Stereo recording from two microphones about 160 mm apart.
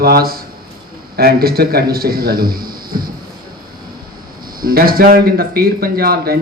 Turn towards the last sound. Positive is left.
turn(degrees=-75)  # may be behind; listen again after turning